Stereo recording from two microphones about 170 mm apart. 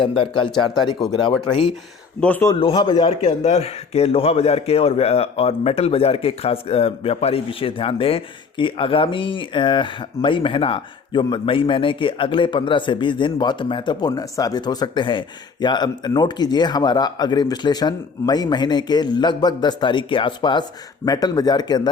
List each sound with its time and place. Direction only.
0.0 s a man's voice: 30° left (ahead or behind)
2.2 s a man's voice: 10° left (ahead or behind)
2.5 s a man's voice: 30° left (ahead or behind)